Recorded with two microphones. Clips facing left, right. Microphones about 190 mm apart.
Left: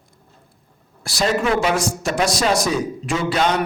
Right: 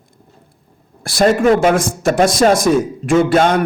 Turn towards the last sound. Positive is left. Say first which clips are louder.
# right 8 dB
turn(degrees=-50)  # may be behind; listen again after turning